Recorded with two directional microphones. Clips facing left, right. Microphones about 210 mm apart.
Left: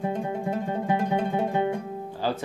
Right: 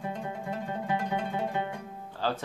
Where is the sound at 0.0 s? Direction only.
25° left (ahead or behind).